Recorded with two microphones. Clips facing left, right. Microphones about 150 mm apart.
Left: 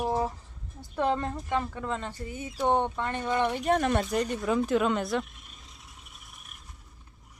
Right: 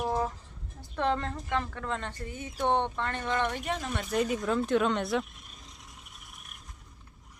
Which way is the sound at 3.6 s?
60° left (ahead or behind).